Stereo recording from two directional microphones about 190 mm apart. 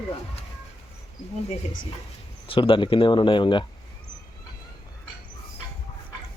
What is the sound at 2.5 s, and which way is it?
Speech, 25° left (ahead or behind).